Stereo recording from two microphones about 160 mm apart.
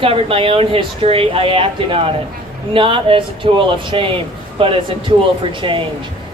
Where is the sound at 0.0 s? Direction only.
35° right (ahead or behind).